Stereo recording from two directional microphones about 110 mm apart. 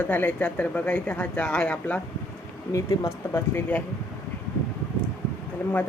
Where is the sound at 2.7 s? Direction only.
30° left (ahead or behind).